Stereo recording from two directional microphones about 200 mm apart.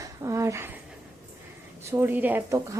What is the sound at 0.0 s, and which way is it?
Dog, 15° right (ahead or behind).